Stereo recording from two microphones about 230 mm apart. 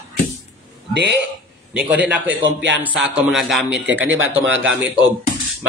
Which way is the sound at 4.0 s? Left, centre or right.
Right.